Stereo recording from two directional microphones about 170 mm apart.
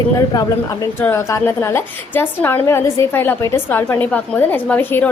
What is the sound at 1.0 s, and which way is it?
A woman's voice, 15° left (ahead or behind).